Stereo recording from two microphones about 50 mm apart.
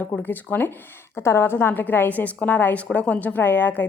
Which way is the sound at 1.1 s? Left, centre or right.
Left.